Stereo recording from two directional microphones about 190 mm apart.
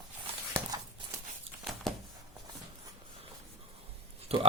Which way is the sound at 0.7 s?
20° right (ahead or behind).